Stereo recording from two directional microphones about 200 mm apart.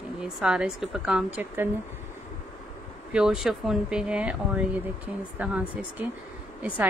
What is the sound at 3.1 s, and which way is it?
Speech, 5° right (ahead or behind).